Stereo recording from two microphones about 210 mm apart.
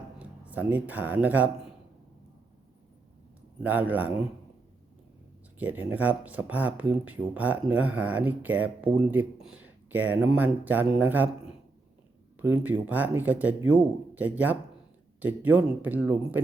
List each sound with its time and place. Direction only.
0.2 s speech: 5° right (ahead or behind)
3.6 s speech: 10° right (ahead or behind)
5.5 s speech: 10° right (ahead or behind)
12.4 s speech: 10° right (ahead or behind)